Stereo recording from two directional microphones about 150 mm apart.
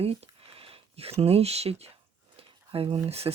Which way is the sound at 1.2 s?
45° right (ahead or behind).